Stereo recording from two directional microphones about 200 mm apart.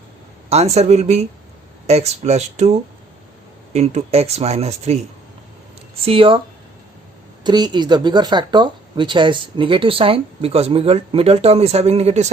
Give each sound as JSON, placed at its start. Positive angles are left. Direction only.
{"t": 0.5, "sound": "speech", "side_deg": -35}
{"t": 7.4, "sound": "speech", "side_deg": -20}